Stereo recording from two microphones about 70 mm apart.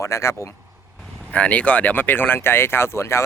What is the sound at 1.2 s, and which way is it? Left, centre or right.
Speech, left.